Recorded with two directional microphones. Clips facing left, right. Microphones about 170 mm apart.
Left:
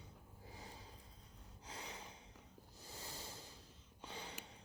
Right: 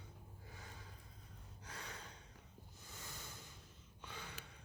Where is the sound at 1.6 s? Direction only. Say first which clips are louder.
Left 1 dB; 20° left (ahead or behind).